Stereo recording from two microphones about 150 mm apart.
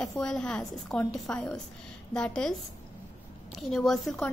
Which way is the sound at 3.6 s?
Centre (ahead or behind).